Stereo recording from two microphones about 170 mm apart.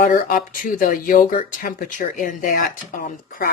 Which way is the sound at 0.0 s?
50° left (ahead or behind).